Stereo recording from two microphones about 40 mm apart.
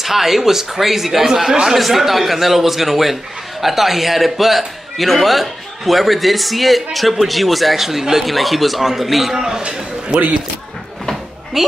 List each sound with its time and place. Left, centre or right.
0.0 s a man's voice: centre
9.6 s speech: right
11.6 s a man's voice: centre